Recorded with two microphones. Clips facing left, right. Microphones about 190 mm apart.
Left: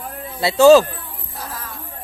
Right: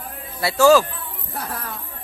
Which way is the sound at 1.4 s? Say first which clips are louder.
Right 3 dB; 65° right (ahead or behind).